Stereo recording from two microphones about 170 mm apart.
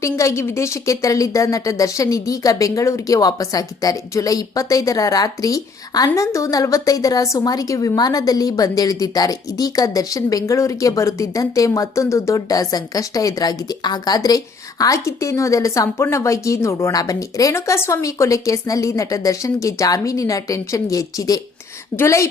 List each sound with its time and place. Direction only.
0.0 s a woman's voice: 15° left (ahead or behind)